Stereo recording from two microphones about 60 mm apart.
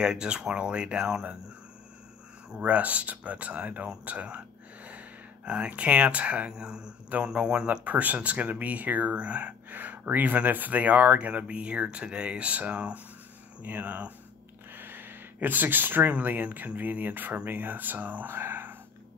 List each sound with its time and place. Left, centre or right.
0.0 s speech: centre
2.6 s speech: right
14.7 s speech: right